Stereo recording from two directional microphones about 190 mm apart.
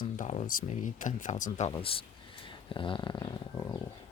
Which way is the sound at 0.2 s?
40° left (ahead or behind).